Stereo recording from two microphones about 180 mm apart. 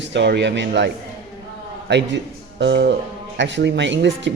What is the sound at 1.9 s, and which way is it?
A man's voice, 75° right (ahead or behind).